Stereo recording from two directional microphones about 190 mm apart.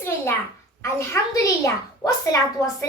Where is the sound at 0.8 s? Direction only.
15° left (ahead or behind).